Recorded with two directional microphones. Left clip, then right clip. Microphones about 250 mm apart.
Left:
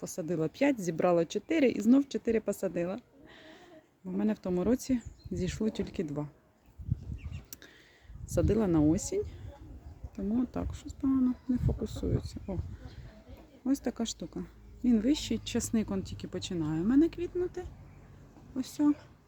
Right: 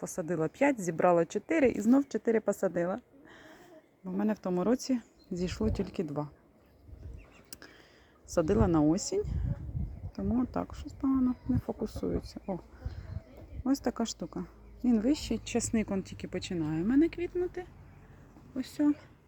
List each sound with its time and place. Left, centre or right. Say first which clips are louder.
0.0 s a woman's voice: right 1 dB; centre
1.8 s speech: even; centre
2.7 s a sound: right 2 dB; centre
4.0 s speech: right 1 dB; centre
8.4 s speech: right 1 dB; centre
13.8 s speech: right 2 dB; centre